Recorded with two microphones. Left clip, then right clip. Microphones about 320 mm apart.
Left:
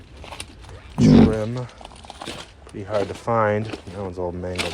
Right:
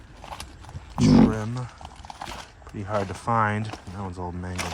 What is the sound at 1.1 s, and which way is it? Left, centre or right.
Speech, centre.